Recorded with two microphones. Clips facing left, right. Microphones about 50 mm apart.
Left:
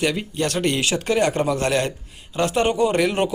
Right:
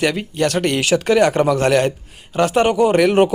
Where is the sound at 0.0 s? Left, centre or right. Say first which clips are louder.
Right 4 dB; right.